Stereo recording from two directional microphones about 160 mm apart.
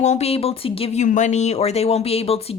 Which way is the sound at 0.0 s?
45° left (ahead or behind).